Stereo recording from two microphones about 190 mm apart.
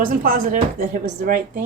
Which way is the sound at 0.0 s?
45° right (ahead or behind).